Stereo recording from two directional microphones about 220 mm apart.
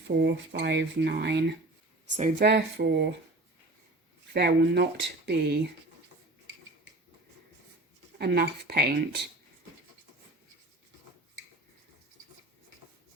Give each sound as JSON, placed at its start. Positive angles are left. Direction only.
{"t": 0.1, "sound": "speech", "side_deg": -50}
{"t": 4.4, "sound": "speech", "side_deg": -50}
{"t": 8.2, "sound": "speech", "side_deg": -45}